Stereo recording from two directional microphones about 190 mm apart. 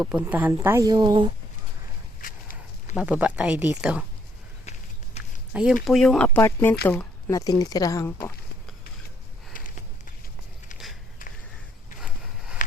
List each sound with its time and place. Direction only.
0.0 s speech: 5° right (ahead or behind)
2.2 s walk: 45° left (ahead or behind)
2.9 s speech: 5° right (ahead or behind)
5.2 s a sound: 35° left (ahead or behind)
5.8 s speech: centre (ahead or behind)
9.5 s sniff: 45° left (ahead or behind)
11.9 s a sound: 5° right (ahead or behind)